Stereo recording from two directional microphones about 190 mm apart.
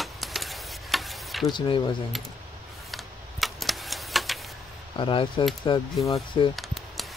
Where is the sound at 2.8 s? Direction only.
Centre (ahead or behind).